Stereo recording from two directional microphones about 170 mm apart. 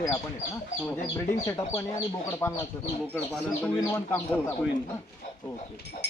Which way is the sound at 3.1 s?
10° left (ahead or behind).